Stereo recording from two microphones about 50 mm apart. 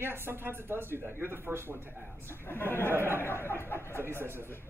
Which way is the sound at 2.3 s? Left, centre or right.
Left.